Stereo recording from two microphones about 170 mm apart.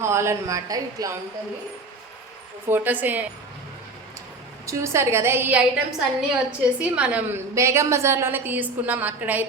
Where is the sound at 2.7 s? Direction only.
10° right (ahead or behind).